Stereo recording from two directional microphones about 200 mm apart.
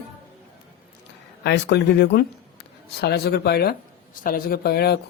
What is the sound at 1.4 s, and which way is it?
Speech, 55° left (ahead or behind).